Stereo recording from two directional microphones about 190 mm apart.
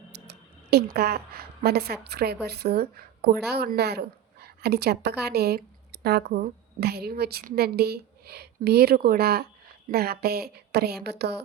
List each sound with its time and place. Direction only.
0.1 s a woman's voice: 60° right (ahead or behind)